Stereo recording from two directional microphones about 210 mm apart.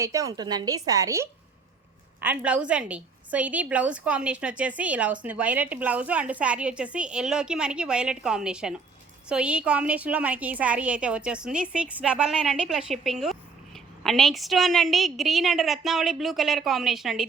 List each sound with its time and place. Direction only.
0.0 s a woman's voice: 15° right (ahead or behind)